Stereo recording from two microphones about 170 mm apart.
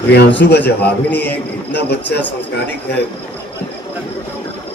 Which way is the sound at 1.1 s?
10° left (ahead or behind).